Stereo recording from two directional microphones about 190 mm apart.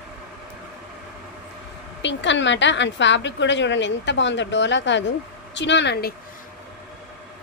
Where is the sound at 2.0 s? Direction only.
70° left (ahead or behind).